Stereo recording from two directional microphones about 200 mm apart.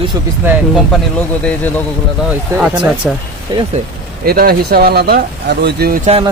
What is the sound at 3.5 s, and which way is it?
Speech, 20° right (ahead or behind).